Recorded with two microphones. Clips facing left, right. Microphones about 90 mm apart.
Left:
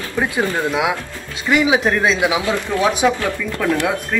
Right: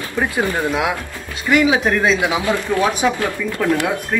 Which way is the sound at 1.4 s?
20° left (ahead or behind).